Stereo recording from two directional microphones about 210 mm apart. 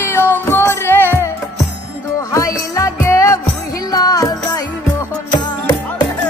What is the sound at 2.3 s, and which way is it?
Music, 15° left (ahead or behind).